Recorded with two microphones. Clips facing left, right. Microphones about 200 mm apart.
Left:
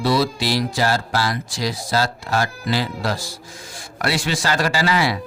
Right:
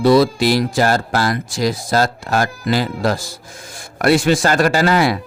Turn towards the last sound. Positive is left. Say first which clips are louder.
# right 5 dB
turn(degrees=-50)  # may be behind; listen again after turning